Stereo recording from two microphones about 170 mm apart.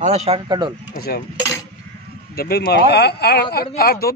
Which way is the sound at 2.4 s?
65° left (ahead or behind).